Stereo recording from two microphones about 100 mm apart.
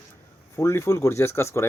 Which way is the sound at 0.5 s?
30° left (ahead or behind).